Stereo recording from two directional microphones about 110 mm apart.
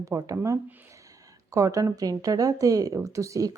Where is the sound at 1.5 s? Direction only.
30° right (ahead or behind).